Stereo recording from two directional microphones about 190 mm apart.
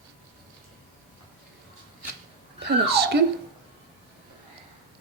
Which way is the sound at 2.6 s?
60° right (ahead or behind).